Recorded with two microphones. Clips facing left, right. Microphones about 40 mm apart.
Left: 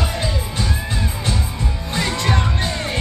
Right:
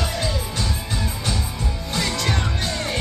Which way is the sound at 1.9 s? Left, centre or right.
Left.